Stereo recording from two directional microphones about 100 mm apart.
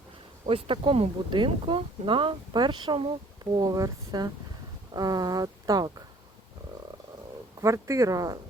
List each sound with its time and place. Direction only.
0.4 s speech: 65° right (ahead or behind)
1.5 s speech: 60° right (ahead or behind)
3.6 s speech: 40° right (ahead or behind)
7.6 s speech: 30° right (ahead or behind)